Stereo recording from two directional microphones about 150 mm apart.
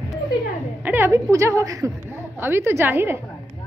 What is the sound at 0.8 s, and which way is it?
A woman's voice, 15° right (ahead or behind).